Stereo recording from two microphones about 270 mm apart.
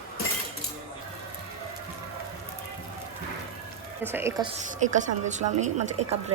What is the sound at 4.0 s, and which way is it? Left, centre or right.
A woman's voice, centre.